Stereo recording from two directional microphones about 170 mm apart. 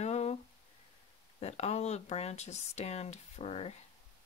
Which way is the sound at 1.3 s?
40° left (ahead or behind).